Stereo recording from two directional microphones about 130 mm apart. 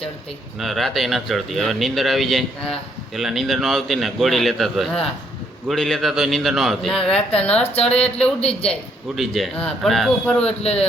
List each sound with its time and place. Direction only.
0.6 s speech: centre (ahead or behind)